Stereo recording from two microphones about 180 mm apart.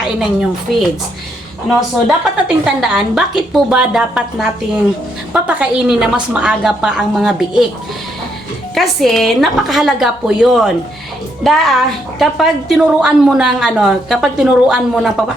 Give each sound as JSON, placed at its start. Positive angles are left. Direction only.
{"t": 0.0, "sound": "a woman's voice", "side_deg": -5}
{"t": 2.6, "sound": "a woman's voice", "side_deg": -5}
{"t": 8.7, "sound": "a woman's voice", "side_deg": 0}